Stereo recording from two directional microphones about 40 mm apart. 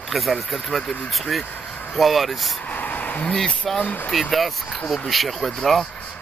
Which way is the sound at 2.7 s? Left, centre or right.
Left.